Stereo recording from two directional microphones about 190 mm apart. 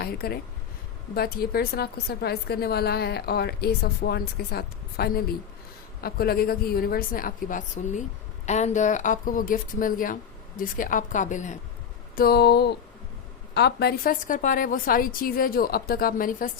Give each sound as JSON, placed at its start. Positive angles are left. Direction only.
{"t": 0.0, "sound": "a woman's voice", "side_deg": 55}
{"t": 12.1, "sound": "a woman's voice", "side_deg": 55}